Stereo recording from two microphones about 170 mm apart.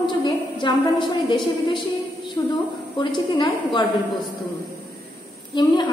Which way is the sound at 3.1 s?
25° left (ahead or behind).